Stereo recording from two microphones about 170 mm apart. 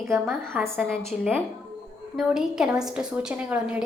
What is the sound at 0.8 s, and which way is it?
A woman's voice, centre (ahead or behind).